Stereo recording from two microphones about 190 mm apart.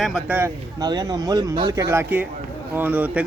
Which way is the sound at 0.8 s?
20° right (ahead or behind).